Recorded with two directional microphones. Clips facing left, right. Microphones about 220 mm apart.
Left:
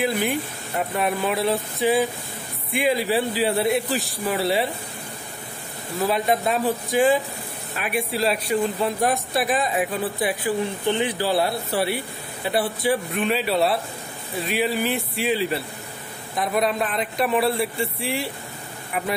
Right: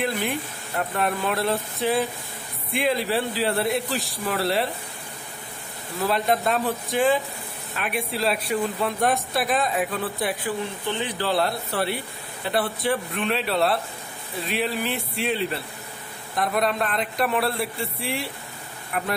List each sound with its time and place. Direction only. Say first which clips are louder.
0.0 s a man's voice: left 3 dB; centre (ahead or behind)
6.0 s a man's voice: left 1 dB; centre (ahead or behind)
10.9 s a man's voice: left 4 dB; 15° left (ahead or behind)